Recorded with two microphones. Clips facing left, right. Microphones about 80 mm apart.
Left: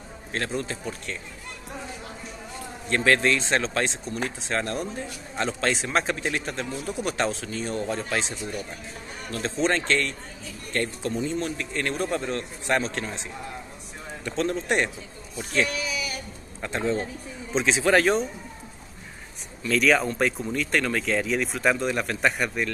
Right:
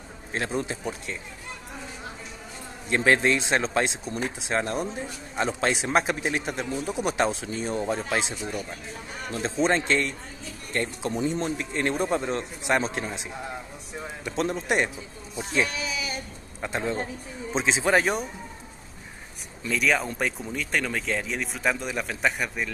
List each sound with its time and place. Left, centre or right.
0.3 s speech: centre
2.9 s speech: centre
15.3 s sheep: centre
16.6 s speech: centre
19.7 s a man's voice: centre